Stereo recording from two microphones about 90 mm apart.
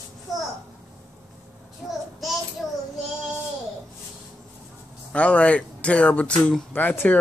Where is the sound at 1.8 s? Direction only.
5° right (ahead or behind).